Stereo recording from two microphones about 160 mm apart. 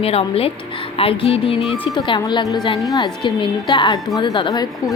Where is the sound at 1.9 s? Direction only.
30° left (ahead or behind).